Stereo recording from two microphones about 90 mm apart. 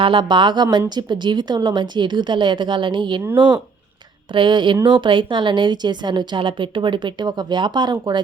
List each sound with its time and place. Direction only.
0.0 s a woman's voice: 70° right (ahead or behind)